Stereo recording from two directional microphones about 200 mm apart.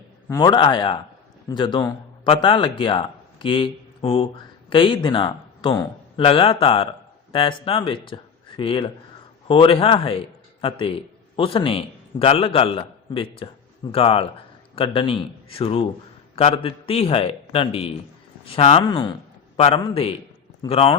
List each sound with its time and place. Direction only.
0.3 s a man's voice: 20° left (ahead or behind)